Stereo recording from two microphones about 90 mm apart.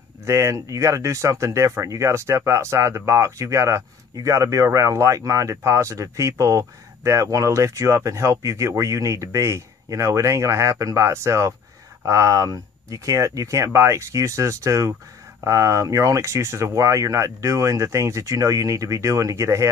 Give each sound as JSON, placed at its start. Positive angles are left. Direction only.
{"t": 0.2, "sound": "speech", "side_deg": -30}